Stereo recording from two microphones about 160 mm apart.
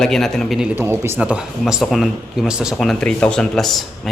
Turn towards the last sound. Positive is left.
turn(degrees=0)  # may be behind; listen again after turning